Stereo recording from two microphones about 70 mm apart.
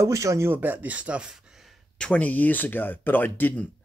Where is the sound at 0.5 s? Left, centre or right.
Right.